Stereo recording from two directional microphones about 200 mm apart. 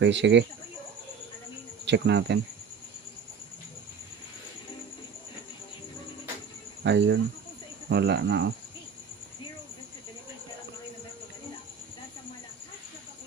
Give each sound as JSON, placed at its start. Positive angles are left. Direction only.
{"t": 0.0, "sound": "speech", "side_deg": -60}
{"t": 1.8, "sound": "speech", "side_deg": -60}
{"t": 6.8, "sound": "speech", "side_deg": -60}